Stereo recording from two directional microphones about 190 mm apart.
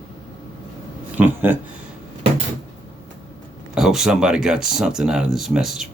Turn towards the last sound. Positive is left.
turn(degrees=-5)  # may be behind; listen again after turning